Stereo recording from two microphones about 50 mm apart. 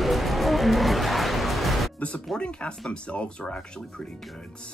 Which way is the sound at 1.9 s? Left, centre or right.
Left.